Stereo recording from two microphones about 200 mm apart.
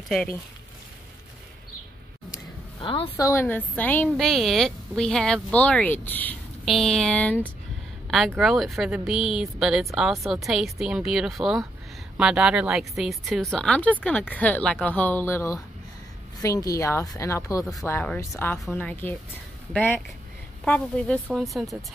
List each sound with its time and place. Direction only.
0.1 s a woman's voice: 5° left (ahead or behind)
2.3 s a sound: 25° left (ahead or behind)
3.3 s a woman's voice: 10° left (ahead or behind)